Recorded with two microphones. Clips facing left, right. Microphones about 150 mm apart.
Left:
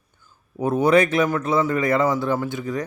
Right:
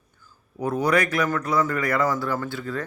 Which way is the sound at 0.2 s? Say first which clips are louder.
Left 4 dB; 25° left (ahead or behind).